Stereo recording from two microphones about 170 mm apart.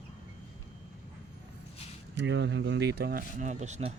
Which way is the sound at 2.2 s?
90° right.